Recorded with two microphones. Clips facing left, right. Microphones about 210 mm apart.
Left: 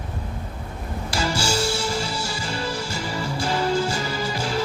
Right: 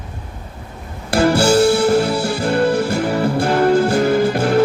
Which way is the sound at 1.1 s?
60° right (ahead or behind).